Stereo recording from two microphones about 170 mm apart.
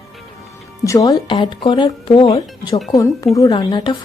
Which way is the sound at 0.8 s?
20° left (ahead or behind).